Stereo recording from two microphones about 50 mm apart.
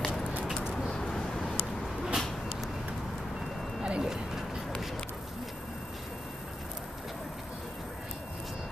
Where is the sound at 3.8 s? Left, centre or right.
Centre.